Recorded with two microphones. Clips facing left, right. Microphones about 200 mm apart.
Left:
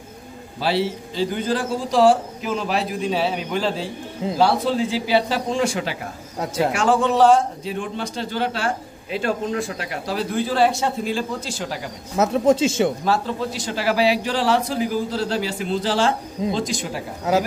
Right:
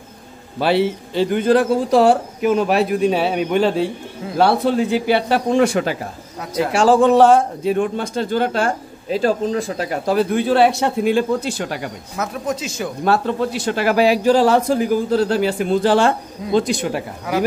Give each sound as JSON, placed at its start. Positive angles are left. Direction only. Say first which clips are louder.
{"t": 0.6, "sound": "speech", "louder": "right 5 dB", "side_deg": -60}
{"t": 6.4, "sound": "speech", "louder": "even", "side_deg": 25}
{"t": 6.7, "sound": "a man's voice", "louder": "right 7 dB", "side_deg": -30}
{"t": 7.0, "sound": "a man's voice", "louder": "right 3 dB", "side_deg": -50}
{"t": 12.2, "sound": "speech", "louder": "left 7 dB", "side_deg": 25}
{"t": 13.0, "sound": "speech", "louder": "right 4 dB", "side_deg": -60}
{"t": 17.3, "sound": "speech", "louder": "left 2 dB", "side_deg": 25}